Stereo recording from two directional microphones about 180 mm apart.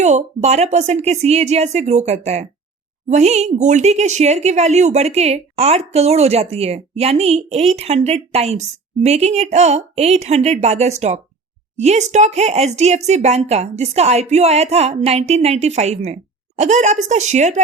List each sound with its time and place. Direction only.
0.0 s speech: 40° right (ahead or behind)